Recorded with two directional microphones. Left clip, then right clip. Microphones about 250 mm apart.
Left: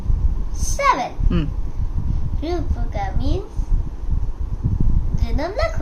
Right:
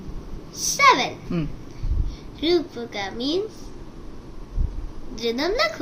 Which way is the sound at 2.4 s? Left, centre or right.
Centre.